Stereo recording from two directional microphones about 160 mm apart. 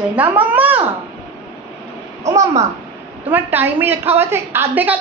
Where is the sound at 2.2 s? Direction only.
20° right (ahead or behind).